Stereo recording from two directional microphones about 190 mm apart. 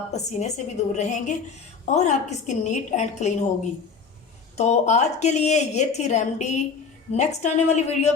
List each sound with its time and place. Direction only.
0.1 s a woman's voice: 35° left (ahead or behind)
4.5 s a woman's voice: 35° left (ahead or behind)